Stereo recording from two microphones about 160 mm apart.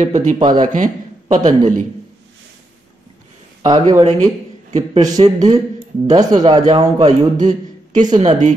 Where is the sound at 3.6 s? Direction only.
25° right (ahead or behind).